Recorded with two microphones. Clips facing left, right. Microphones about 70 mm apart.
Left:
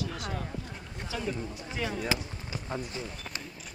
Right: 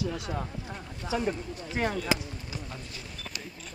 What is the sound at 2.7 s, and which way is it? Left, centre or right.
Speech, left.